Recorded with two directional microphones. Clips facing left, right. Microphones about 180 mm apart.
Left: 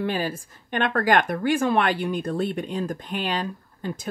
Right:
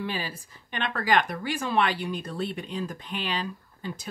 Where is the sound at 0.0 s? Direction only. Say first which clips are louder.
Left 7 dB; 50° left (ahead or behind).